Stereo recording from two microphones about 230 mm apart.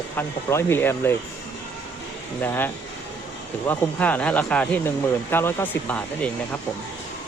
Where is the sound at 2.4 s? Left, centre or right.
Centre.